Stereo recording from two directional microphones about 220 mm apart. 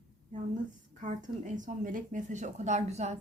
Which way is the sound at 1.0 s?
35° right (ahead or behind).